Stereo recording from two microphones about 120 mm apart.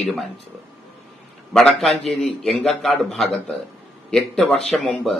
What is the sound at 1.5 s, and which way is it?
Speech, 5° left (ahead or behind).